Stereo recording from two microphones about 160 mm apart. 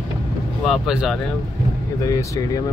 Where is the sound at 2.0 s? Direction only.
20° left (ahead or behind).